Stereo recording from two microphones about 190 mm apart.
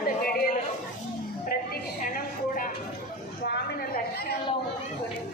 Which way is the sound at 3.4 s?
60° left (ahead or behind).